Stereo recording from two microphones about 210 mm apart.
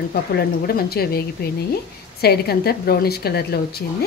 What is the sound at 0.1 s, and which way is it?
Speech, 45° left (ahead or behind).